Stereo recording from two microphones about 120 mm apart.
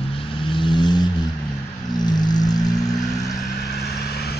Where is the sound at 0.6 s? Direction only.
40° left (ahead or behind).